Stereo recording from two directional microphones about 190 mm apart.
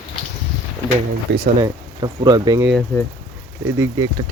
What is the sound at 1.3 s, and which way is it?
Speech, 65° right (ahead or behind).